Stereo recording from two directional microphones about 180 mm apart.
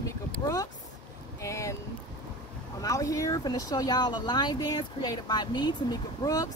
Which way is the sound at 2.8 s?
20° left (ahead or behind).